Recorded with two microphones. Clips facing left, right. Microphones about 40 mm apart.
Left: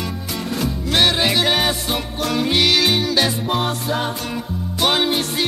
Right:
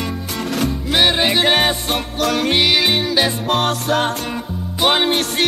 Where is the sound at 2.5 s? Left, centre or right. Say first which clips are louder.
Left 1 dB; centre.